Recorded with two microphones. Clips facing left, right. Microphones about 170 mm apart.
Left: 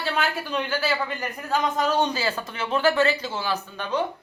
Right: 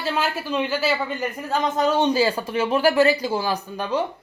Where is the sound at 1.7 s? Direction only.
25° right (ahead or behind).